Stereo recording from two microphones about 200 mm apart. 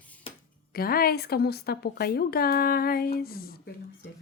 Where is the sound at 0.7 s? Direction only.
50° left (ahead or behind).